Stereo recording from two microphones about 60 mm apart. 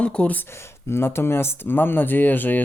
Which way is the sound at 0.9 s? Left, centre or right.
Left.